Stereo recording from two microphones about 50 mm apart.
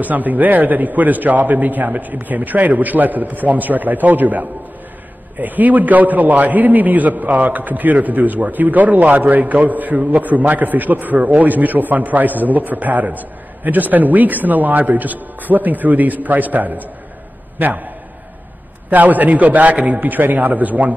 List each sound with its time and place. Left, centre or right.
0.0 s a man's voice: right
18.9 s a man's voice: right